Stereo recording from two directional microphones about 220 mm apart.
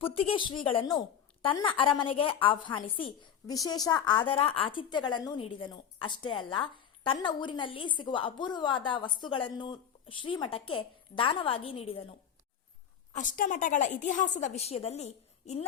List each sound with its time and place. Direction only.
0.0 s a woman's voice: 25° left (ahead or behind)
13.1 s a woman's voice: 40° left (ahead or behind)